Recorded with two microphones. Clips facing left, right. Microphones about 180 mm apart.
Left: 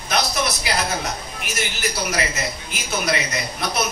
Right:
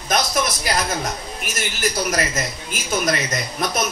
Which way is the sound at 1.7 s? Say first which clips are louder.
Right 4 dB; 50° right (ahead or behind).